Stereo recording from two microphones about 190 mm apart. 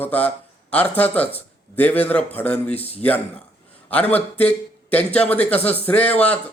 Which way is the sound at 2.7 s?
30° left (ahead or behind).